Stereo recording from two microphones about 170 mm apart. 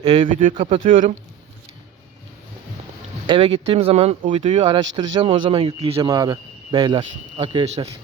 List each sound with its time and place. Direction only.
0.0 s speech: 30° right (ahead or behind)
0.9 s speech: 50° right (ahead or behind)
3.2 s speech: 30° right (ahead or behind)
7.3 s speech: 40° right (ahead or behind)